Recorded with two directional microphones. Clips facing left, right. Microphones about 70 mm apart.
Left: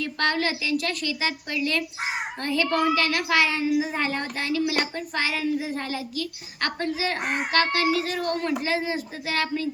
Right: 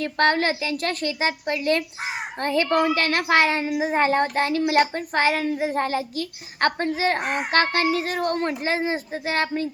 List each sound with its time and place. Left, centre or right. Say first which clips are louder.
0.0 s a woman's voice: right 4 dB; right